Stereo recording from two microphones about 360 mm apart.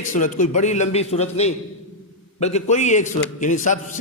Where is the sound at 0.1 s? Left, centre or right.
Left.